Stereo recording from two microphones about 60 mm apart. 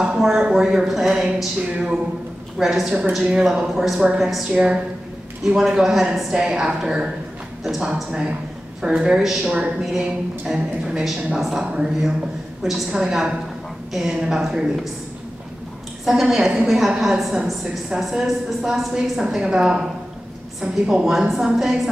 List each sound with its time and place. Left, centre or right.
0.3 s a woman's voice: centre
16.1 s a woman's voice: centre